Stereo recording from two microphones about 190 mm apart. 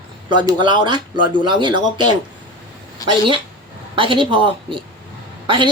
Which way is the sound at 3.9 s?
25° right (ahead or behind).